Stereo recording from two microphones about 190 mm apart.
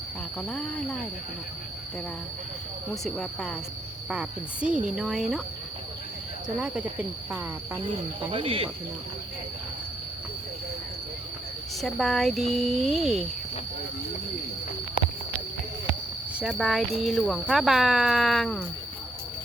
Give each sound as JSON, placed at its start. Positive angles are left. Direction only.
{"t": 0.3, "sound": "speech", "side_deg": 5}
{"t": 2.9, "sound": "speech", "side_deg": 0}
{"t": 7.3, "sound": "speech", "side_deg": -10}
{"t": 8.3, "sound": "speech", "side_deg": -30}
{"t": 11.8, "sound": "speech", "side_deg": 0}
{"t": 16.3, "sound": "speech", "side_deg": -5}